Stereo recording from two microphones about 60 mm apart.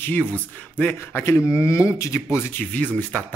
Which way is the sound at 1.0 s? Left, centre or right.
Left.